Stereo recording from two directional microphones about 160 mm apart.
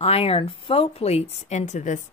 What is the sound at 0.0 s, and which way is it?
Speech, 35° left (ahead or behind).